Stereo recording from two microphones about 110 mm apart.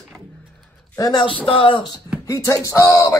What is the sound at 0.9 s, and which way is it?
Speech, 35° left (ahead or behind).